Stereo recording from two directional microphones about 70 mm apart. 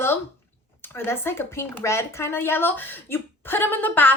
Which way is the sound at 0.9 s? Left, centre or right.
Left.